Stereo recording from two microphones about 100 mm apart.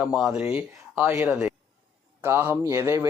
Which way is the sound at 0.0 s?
5° right (ahead or behind).